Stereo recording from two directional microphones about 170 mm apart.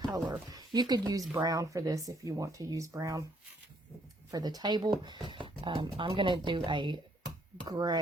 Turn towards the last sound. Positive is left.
turn(degrees=-25)  # may be behind; listen again after turning